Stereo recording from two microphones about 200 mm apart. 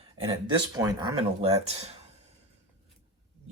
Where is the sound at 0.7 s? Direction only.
20° right (ahead or behind).